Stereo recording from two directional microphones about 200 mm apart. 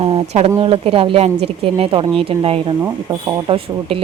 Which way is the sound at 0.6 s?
30° right (ahead or behind).